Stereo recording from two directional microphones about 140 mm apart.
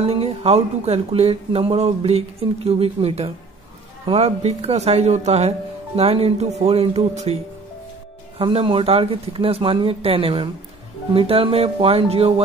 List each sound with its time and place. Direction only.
0.0 s speech: 45° right (ahead or behind)
8.4 s speech: 40° right (ahead or behind)